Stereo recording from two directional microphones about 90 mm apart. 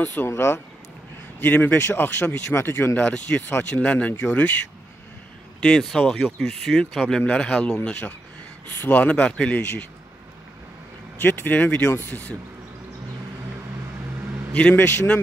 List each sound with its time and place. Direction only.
0.0 s speech: 20° left (ahead or behind)
5.6 s speech: 5° left (ahead or behind)
11.1 s speech: 20° left (ahead or behind)
14.5 s speech: 15° left (ahead or behind)